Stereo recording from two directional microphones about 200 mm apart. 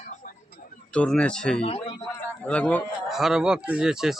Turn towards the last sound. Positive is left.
turn(degrees=-5)  # may be behind; listen again after turning